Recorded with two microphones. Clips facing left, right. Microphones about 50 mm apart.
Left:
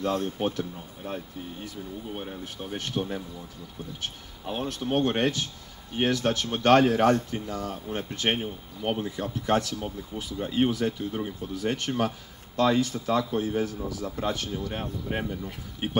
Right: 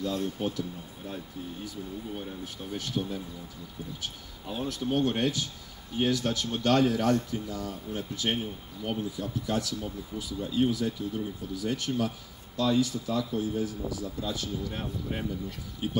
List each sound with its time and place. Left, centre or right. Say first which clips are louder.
0.0 s speech: left 3 dB; left